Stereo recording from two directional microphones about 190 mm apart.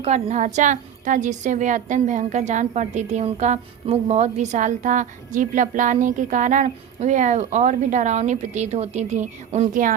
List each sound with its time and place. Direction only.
0.0 s a woman's voice: 35° right (ahead or behind)